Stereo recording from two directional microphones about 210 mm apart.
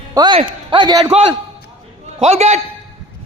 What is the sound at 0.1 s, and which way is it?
A man's voice, 20° right (ahead or behind).